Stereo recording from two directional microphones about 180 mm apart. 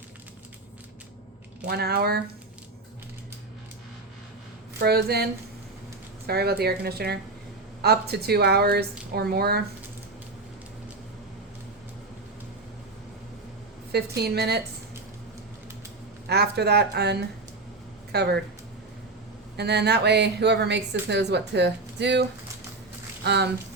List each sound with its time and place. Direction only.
1.6 s speech: 60° right (ahead or behind)
4.8 s speech: 65° right (ahead or behind)
13.9 s speech: 65° right (ahead or behind)
16.2 s speech: 65° right (ahead or behind)
19.5 s speech: 65° right (ahead or behind)